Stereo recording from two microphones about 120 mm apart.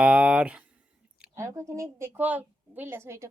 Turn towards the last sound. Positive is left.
turn(degrees=-20)  # may be behind; listen again after turning